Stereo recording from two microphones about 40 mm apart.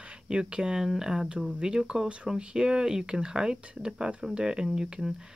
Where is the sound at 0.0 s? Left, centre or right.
Right.